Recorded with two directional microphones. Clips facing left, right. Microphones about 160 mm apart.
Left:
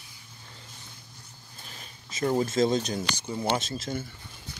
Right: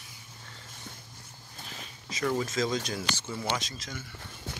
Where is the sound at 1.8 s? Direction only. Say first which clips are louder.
Left 3 dB; 40° left (ahead or behind); by 3.5 s 15° left (ahead or behind).